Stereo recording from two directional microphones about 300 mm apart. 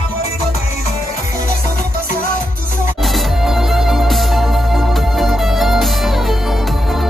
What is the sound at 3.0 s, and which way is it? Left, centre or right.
Music, centre.